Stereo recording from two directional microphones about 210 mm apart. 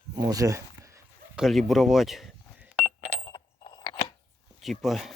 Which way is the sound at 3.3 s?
20° left (ahead or behind).